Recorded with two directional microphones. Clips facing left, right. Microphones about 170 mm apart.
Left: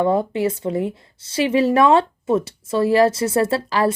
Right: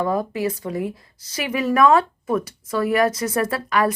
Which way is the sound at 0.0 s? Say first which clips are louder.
Left 4 dB; 25° left (ahead or behind).